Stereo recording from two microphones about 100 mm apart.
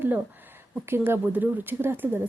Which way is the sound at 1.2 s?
20° right (ahead or behind).